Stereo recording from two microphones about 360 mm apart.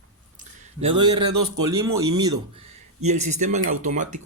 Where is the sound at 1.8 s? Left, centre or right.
Centre.